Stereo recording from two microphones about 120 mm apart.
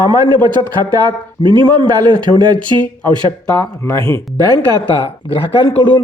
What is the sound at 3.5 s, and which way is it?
Speech, 30° left (ahead or behind).